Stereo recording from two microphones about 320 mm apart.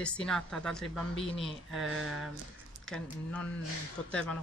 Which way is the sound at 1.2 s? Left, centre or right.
Centre.